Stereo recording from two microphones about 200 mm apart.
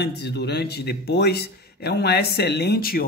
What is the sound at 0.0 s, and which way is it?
Speech, 55° left (ahead or behind).